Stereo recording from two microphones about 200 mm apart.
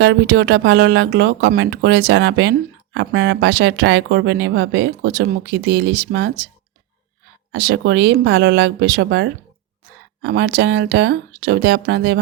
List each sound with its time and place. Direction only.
0.0 s speech: 60° right (ahead or behind)
7.5 s speech: 60° right (ahead or behind)